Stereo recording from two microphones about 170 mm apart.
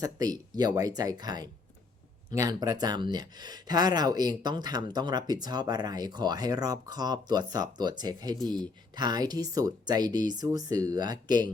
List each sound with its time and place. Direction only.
0.0 s speech: 20° right (ahead or behind)